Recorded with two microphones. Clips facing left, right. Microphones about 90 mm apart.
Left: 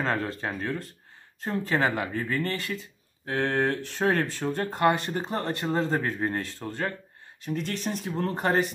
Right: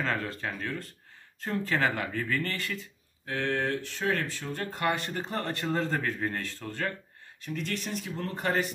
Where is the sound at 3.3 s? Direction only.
35° left (ahead or behind).